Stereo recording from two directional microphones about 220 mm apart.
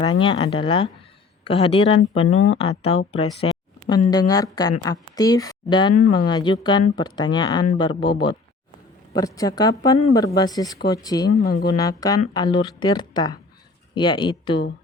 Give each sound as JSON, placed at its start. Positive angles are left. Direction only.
{"t": 0.0, "sound": "speech", "side_deg": 20}
{"t": 2.2, "sound": "speech", "side_deg": 65}
{"t": 2.6, "sound": "speech", "side_deg": 25}
{"t": 9.1, "sound": "speech", "side_deg": 15}
{"t": 11.4, "sound": "speech", "side_deg": 45}
{"t": 11.8, "sound": "speech", "side_deg": 15}